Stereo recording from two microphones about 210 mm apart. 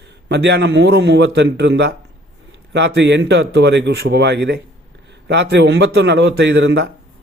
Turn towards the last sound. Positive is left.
turn(degrees=-55)  # may be behind; listen again after turning